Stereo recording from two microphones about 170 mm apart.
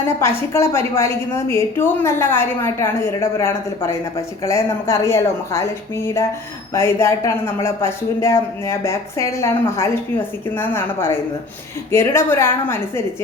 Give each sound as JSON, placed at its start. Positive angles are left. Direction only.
{"t": 0.2, "sound": "speech", "side_deg": 15}